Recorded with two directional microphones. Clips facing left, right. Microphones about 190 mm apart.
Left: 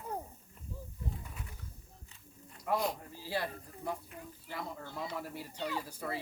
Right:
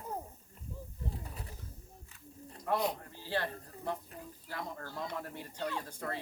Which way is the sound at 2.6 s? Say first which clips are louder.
Even; centre (ahead or behind).